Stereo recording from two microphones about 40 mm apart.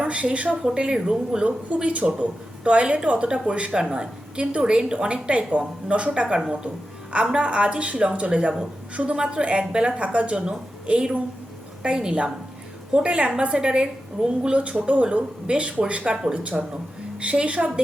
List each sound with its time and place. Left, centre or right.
0.0 s a woman's voice: right
1.5 s a woman's voice: right
6.2 s a woman's voice: centre
7.1 s a woman's voice: right
10.0 s a woman's voice: right